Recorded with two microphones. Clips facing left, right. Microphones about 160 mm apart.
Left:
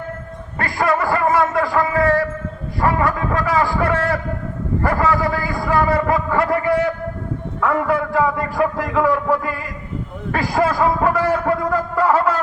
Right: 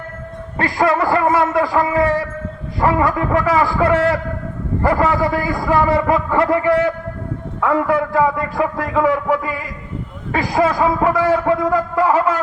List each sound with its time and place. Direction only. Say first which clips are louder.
0.6 s a man's voice: right 3 dB; 20° right (ahead or behind)